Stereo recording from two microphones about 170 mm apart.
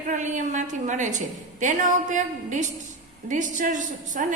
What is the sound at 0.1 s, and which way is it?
A woman's voice, 45° right (ahead or behind).